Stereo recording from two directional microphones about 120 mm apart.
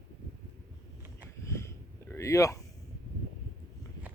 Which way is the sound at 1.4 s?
25° left (ahead or behind).